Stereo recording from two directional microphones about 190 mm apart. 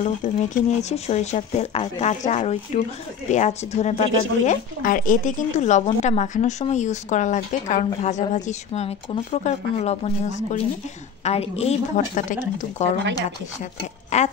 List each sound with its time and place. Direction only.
0.0 s speech: 40° left (ahead or behind)
14.1 s speech: 35° left (ahead or behind)